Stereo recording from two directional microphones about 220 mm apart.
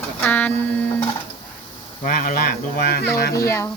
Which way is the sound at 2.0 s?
40° left (ahead or behind).